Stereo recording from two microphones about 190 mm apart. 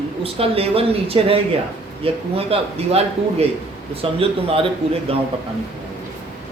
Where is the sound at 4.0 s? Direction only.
30° right (ahead or behind).